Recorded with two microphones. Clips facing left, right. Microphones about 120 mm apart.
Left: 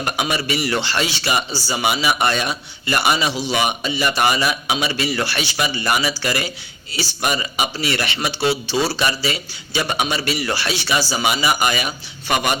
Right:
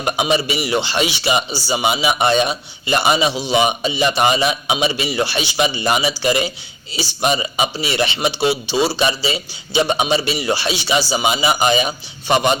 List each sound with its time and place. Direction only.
0.0 s a man's voice: 20° right (ahead or behind)